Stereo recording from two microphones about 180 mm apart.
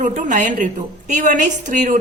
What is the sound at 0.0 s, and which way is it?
A woman's voice, 45° right (ahead or behind).